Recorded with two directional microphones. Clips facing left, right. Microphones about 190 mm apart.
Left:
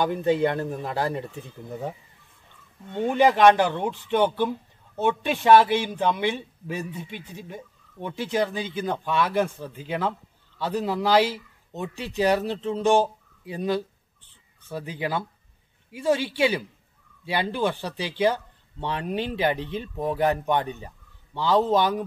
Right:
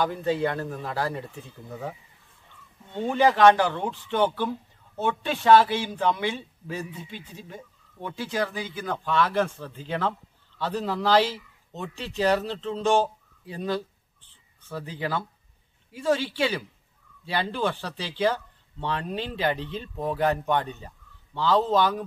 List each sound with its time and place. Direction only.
0.0 s speech: 20° left (ahead or behind)